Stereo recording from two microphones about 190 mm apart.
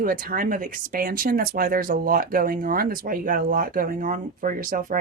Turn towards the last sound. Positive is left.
turn(degrees=-45)  # may be behind; listen again after turning